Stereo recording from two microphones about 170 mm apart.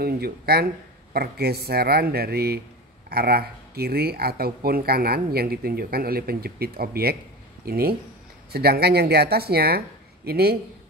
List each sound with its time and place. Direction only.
0.0 s speech: 65° right (ahead or behind)